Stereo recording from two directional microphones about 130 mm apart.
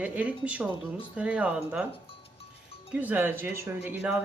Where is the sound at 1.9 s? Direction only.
50° left (ahead or behind).